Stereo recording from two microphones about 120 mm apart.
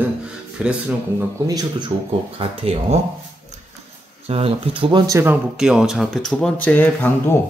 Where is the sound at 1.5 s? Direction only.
35° right (ahead or behind).